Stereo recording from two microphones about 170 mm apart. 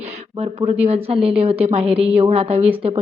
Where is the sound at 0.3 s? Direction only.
40° right (ahead or behind).